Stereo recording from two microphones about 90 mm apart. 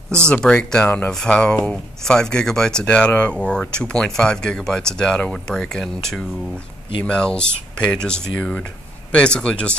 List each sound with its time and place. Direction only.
0.2 s speech: 10° left (ahead or behind)
0.8 s speech: 20° left (ahead or behind)
1.1 s speech: 10° left (ahead or behind)